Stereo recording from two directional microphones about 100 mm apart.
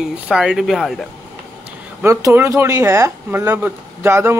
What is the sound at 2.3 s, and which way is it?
Speech, 30° right (ahead or behind).